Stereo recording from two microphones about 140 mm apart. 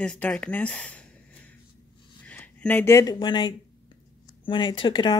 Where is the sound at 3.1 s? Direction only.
30° left (ahead or behind).